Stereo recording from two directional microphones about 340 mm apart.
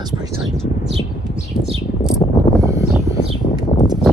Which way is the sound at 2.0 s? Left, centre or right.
Centre.